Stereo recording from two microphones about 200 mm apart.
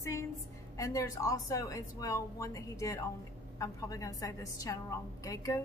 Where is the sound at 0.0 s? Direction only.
15° left (ahead or behind).